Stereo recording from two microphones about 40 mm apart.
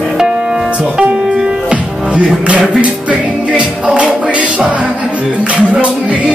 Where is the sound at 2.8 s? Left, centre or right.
Right.